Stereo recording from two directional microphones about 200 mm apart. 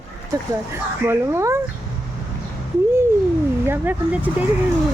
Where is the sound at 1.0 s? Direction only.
15° right (ahead or behind).